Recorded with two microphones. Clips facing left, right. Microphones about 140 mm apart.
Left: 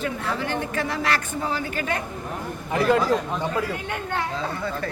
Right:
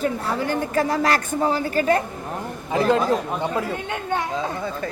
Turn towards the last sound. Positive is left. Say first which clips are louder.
# right 2 dB
turn(degrees=-15)  # may be behind; listen again after turning